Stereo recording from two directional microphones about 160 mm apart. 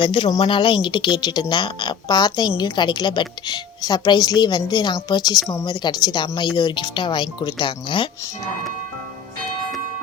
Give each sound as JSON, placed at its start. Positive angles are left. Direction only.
{"t": 0.0, "sound": "speech", "side_deg": 30}